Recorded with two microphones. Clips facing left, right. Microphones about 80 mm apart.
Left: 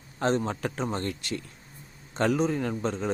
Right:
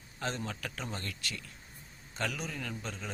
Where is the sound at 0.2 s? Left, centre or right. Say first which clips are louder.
Left 11 dB; left.